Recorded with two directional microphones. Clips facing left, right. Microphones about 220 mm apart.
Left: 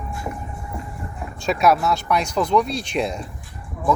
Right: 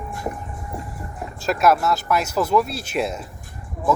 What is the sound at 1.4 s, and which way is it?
Speech, centre (ahead or behind).